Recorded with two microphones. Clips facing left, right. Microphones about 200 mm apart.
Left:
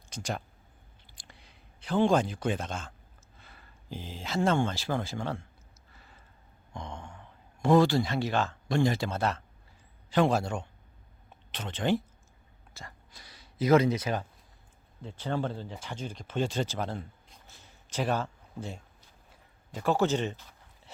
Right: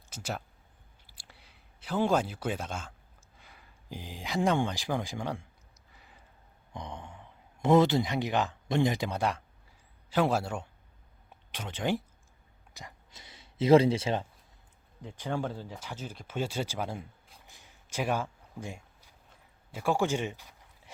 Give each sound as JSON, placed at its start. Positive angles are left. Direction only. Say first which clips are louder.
{"t": 0.1, "sound": "speech", "louder": "left 2 dB", "side_deg": -5}
{"t": 1.0, "sound": "a sound", "louder": "left 2 dB", "side_deg": -10}
{"t": 3.3, "sound": "speech", "louder": "left 1 dB", "side_deg": -10}
{"t": 5.9, "sound": "a sound", "louder": "even", "side_deg": -15}
{"t": 6.7, "sound": "speech", "louder": "even", "side_deg": -20}
{"t": 15.0, "sound": "speech", "louder": "left 1 dB", "side_deg": -15}